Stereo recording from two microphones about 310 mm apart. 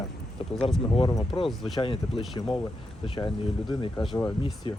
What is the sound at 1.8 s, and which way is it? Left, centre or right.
Speech, centre.